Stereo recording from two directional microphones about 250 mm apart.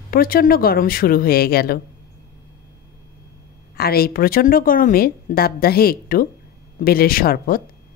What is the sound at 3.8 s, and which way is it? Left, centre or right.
Speech, left.